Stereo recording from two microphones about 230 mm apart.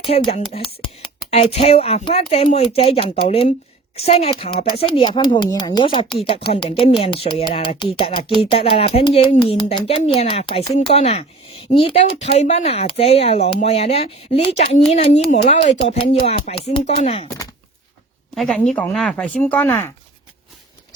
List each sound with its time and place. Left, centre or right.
0.0 s speech: left
18.3 s speech: centre